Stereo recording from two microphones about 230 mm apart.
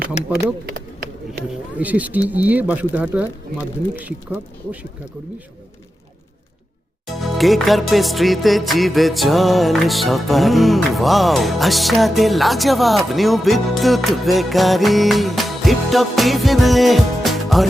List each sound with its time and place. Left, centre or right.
0.2 s speech: left
0.6 s a sound: right
1.7 s speech: centre
7.1 s music: centre